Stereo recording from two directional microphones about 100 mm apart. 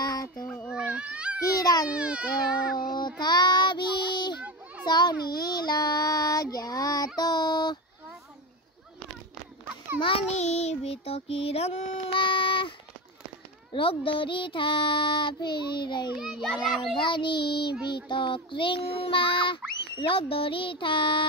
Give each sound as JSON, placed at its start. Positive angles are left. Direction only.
{"t": 0.0, "sound": "a sound", "side_deg": 40}
{"t": 0.7, "sound": "baby cry", "side_deg": -10}
{"t": 1.4, "sound": "baby cry", "side_deg": 35}
{"t": 1.9, "sound": "speech", "side_deg": -10}
{"t": 3.2, "sound": "child singing", "side_deg": 45}
{"t": 4.4, "sound": "children playing", "side_deg": -15}
{"t": 4.8, "sound": "child singing", "side_deg": 45}
{"t": 9.9, "sound": "child singing", "side_deg": 65}
{"t": 12.2, "sound": "a sound", "side_deg": 60}
{"t": 13.7, "sound": "child singing", "side_deg": 60}
{"t": 18.0, "sound": "a child's voice", "side_deg": 55}